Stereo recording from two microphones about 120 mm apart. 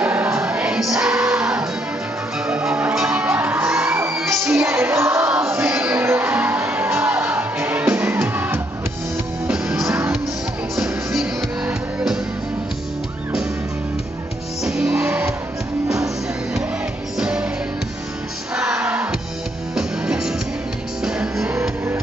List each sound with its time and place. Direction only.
0.0 s music: 10° right (ahead or behind)
5.5 s music: 5° right (ahead or behind)
5.8 s music: 20° right (ahead or behind)
9.5 s music: 5° right (ahead or behind)
14.6 s music: 5° right (ahead or behind)
17.2 s music: 10° right (ahead or behind)
18.5 s music: 5° right (ahead or behind)